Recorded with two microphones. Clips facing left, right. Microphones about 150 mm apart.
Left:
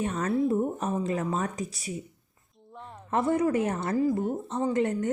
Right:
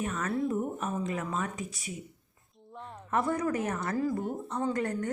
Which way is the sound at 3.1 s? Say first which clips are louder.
Left 4 dB; 25° left (ahead or behind).